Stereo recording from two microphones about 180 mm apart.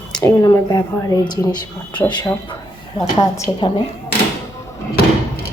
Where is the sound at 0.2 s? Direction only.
20° left (ahead or behind).